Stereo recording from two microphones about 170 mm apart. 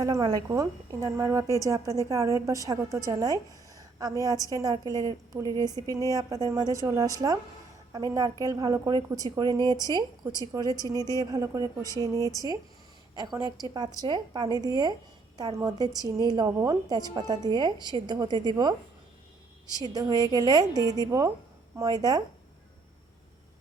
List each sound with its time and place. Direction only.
0.0 s speech: 20° right (ahead or behind)
3.8 s a sound: 20° right (ahead or behind)
4.5 s speech: 20° right (ahead or behind)
10.9 s a woman's voice: 15° left (ahead or behind)
11.2 s speech: 20° right (ahead or behind)
19.9 s speech: 20° right (ahead or behind)